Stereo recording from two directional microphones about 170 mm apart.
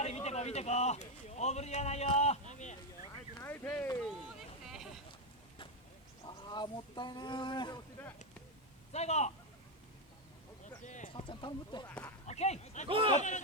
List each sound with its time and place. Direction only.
0.0 s speech: 40° left (ahead or behind)
2.1 s a sound: 40° left (ahead or behind)
3.3 s speech: 15° left (ahead or behind)
6.2 s speech: 25° left (ahead or behind)
8.9 s a man's voice: 40° left (ahead or behind)
10.8 s clip-clop: 45° left (ahead or behind)
11.1 s speech: 30° left (ahead or behind)
12.3 s speech: 40° left (ahead or behind)
12.9 s speech: 30° right (ahead or behind)
13.1 s speech: 45° left (ahead or behind)